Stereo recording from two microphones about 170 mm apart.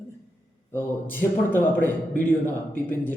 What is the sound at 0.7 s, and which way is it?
Speech, 10° left (ahead or behind).